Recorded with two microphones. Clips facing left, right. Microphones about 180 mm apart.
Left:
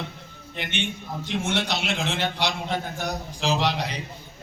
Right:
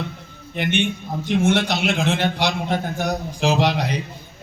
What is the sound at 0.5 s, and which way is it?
A man's voice, 50° right (ahead or behind).